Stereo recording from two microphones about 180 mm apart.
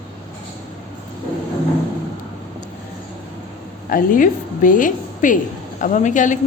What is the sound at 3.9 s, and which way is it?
A woman's voice, 50° left (ahead or behind).